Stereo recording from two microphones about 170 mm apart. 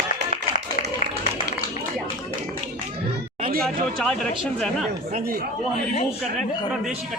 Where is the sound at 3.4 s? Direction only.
60° right (ahead or behind).